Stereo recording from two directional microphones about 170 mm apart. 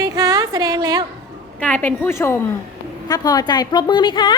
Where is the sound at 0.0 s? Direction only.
20° right (ahead or behind).